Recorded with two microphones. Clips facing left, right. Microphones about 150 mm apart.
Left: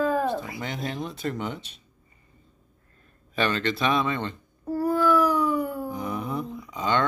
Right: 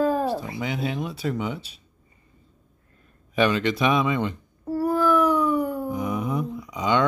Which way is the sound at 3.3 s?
10° right (ahead or behind).